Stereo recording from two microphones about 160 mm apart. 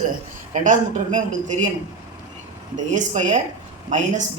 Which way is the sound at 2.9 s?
50° right (ahead or behind).